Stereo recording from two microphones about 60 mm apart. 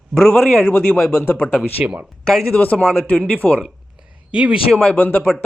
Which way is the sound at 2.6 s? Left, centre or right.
Left.